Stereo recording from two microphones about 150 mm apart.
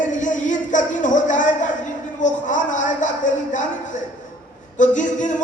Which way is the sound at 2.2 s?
55° left (ahead or behind).